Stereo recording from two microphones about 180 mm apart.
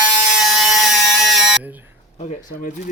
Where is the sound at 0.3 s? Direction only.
Centre (ahead or behind).